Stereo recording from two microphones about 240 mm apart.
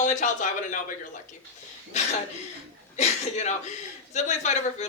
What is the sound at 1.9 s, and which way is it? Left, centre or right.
Speech, left.